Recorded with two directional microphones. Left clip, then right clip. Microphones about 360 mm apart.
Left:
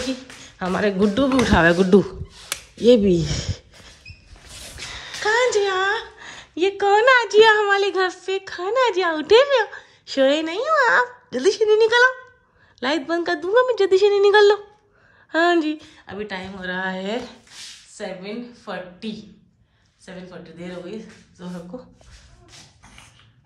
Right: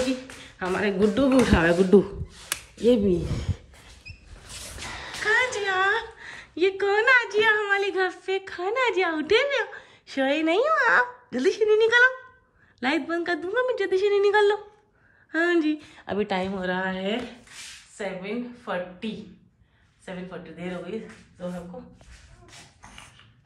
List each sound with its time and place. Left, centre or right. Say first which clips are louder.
0.6 s a woman's voice: left 3 dB; centre
2.8 s speech: left 6 dB; right
4.7 s a woman's voice: left 2 dB; centre
20.1 s speech: right 1 dB; centre